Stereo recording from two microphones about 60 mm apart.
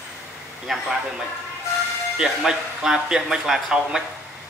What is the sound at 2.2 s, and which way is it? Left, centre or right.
Speech, centre.